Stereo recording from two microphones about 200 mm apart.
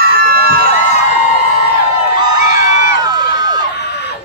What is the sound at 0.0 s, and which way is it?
Crowd, 50° right (ahead or behind).